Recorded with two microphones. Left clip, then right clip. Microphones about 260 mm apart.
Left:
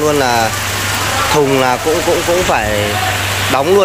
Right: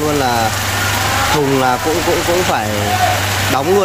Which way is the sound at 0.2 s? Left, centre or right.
Centre.